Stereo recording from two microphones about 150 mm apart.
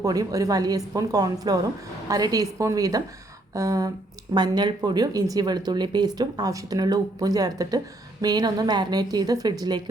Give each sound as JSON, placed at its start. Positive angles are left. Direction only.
{"t": 0.0, "sound": "speech", "side_deg": -25}